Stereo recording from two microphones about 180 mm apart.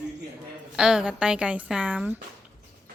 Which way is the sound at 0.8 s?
5° right (ahead or behind).